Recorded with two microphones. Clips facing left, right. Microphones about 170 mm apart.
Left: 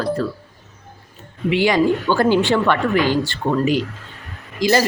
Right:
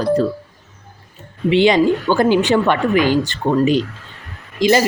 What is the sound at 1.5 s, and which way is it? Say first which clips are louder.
A woman's voice: right 3 dB; 25° right (ahead or behind).